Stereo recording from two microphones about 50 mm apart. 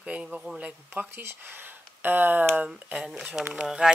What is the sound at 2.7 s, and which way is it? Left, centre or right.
Speech, centre.